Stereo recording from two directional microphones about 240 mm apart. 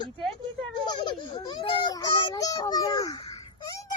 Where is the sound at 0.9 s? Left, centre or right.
Centre.